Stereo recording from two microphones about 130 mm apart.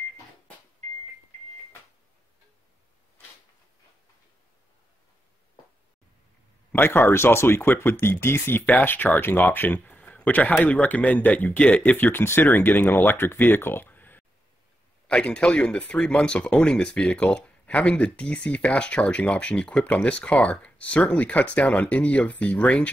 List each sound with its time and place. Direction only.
6.7 s speech: 15° left (ahead or behind)